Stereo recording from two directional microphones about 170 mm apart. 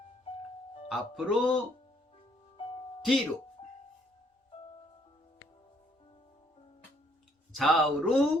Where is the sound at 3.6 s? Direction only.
35° left (ahead or behind).